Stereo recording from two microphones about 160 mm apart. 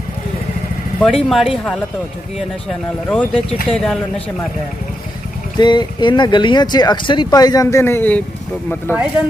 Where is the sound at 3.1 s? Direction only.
10° left (ahead or behind).